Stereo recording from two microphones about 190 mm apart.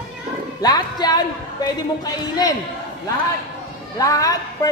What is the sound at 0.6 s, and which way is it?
Music, 20° left (ahead or behind).